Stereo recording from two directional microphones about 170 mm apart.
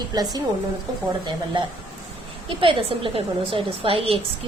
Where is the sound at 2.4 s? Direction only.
30° right (ahead or behind).